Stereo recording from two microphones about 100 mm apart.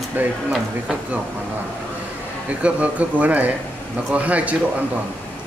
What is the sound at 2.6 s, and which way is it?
Speech, 15° right (ahead or behind).